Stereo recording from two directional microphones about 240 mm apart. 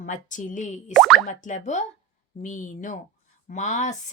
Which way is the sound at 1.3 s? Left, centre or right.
Left.